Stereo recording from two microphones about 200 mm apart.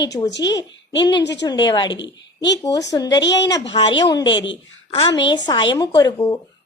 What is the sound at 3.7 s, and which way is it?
Speech, 25° left (ahead or behind).